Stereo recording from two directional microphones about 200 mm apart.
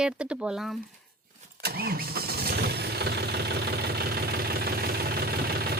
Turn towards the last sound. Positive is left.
turn(degrees=-50)  # may be behind; listen again after turning